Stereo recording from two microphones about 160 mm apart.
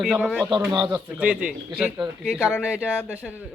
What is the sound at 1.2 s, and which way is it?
Speech, 10° right (ahead or behind).